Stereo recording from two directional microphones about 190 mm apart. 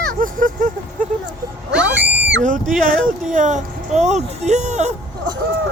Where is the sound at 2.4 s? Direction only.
45° right (ahead or behind).